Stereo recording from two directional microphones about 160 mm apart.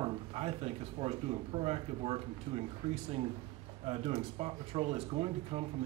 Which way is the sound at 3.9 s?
40° right (ahead or behind).